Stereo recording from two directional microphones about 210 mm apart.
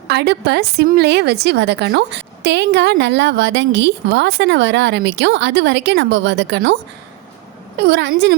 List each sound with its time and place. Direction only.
0.1 s a woman's voice: 50° right (ahead or behind)
7.8 s a woman's voice: 50° right (ahead or behind)